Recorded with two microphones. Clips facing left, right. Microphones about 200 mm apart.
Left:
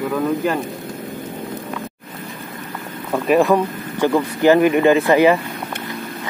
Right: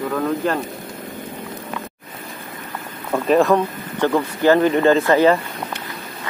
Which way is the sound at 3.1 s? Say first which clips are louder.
Even; 10° left (ahead or behind).